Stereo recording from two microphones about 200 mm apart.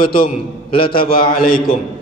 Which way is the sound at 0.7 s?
25° left (ahead or behind).